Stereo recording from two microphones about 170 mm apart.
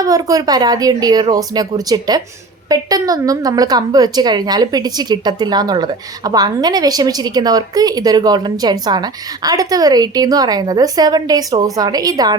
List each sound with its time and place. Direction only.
0.0 s a woman's voice: 20° right (ahead or behind)